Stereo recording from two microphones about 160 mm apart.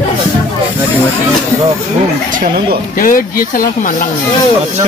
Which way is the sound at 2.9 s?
60° left (ahead or behind).